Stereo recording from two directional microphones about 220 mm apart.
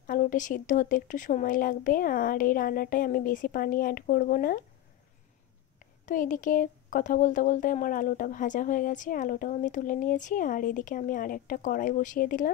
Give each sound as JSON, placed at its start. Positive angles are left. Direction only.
{"t": 0.0, "sound": "speech", "side_deg": 40}
{"t": 5.8, "sound": "speech", "side_deg": 35}